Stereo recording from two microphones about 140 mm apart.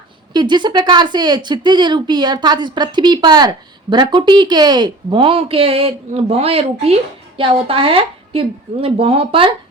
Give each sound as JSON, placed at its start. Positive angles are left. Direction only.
{"t": 0.3, "sound": "a woman's voice", "side_deg": -30}